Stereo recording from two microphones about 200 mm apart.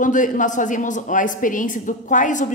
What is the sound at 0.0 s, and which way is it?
A woman's voice, 40° left (ahead or behind).